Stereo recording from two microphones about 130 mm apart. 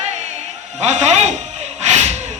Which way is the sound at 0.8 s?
60° right (ahead or behind).